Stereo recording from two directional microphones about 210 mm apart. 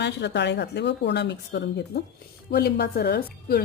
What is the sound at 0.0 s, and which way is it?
A woman's voice, 55° left (ahead or behind).